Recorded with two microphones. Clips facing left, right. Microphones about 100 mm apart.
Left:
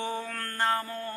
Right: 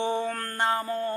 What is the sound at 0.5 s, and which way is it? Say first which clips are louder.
Speech: right 1 dB; 20° right (ahead or behind).